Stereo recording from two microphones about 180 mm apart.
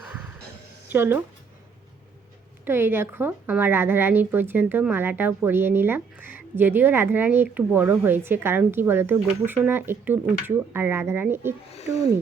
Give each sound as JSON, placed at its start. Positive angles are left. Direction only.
{"t": 0.9, "sound": "speech", "side_deg": -10}
{"t": 2.6, "sound": "a woman's voice", "side_deg": -10}
{"t": 11.7, "sound": "speech", "side_deg": 35}